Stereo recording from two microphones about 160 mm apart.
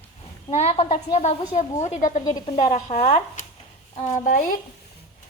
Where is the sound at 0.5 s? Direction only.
40° left (ahead or behind).